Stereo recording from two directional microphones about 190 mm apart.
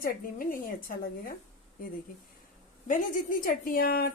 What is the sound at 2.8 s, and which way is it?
A woman's voice, 45° left (ahead or behind).